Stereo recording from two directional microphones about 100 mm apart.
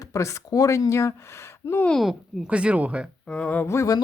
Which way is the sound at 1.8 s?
Centre (ahead or behind).